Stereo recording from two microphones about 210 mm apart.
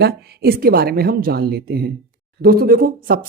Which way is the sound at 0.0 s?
45° right (ahead or behind).